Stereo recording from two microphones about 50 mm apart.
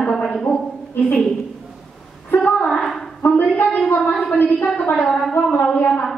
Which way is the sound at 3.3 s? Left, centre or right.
Left.